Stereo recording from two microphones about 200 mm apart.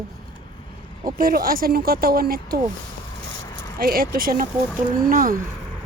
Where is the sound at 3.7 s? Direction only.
45° right (ahead or behind).